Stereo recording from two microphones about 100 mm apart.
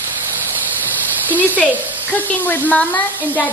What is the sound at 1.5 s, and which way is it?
Speech, 15° left (ahead or behind).